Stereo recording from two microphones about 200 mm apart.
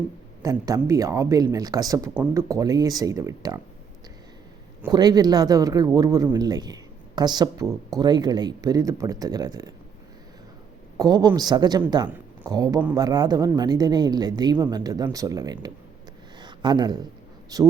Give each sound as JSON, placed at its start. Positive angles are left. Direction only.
{"t": 0.4, "sound": "speech", "side_deg": -15}
{"t": 4.9, "sound": "speech", "side_deg": -20}
{"t": 10.9, "sound": "speech", "side_deg": -20}
{"t": 16.4, "sound": "a sound", "side_deg": -20}
{"t": 17.5, "sound": "speech", "side_deg": -15}